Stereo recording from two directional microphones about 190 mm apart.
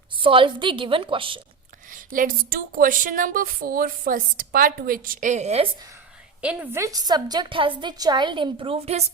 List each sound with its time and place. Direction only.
0.2 s a woman's voice: 25° right (ahead or behind)
1.9 s speech: 45° right (ahead or behind)
6.4 s a woman's voice: 5° right (ahead or behind); by 9.1 s 35° right (ahead or behind)